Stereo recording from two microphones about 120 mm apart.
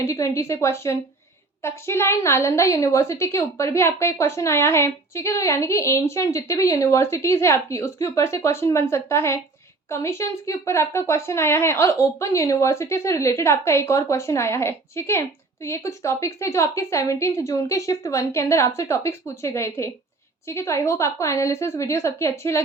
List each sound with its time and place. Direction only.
0.0 s a woman's voice: 25° left (ahead or behind)